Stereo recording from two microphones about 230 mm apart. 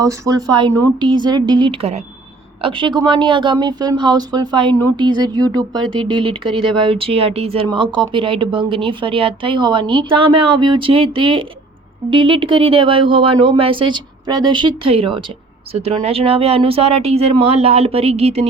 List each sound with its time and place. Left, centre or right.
0.0 s speech: centre